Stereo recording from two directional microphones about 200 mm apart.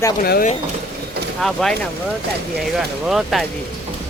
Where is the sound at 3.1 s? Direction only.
Centre (ahead or behind).